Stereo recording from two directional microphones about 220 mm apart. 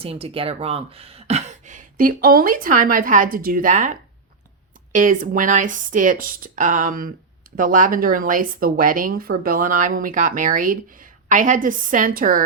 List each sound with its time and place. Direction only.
0.0 s speech: 25° right (ahead or behind)